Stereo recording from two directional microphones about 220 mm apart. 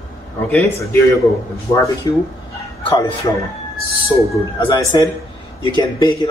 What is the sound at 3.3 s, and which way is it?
A man's voice, 20° left (ahead or behind).